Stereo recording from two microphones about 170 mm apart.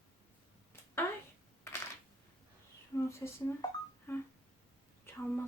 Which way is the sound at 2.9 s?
15° left (ahead or behind).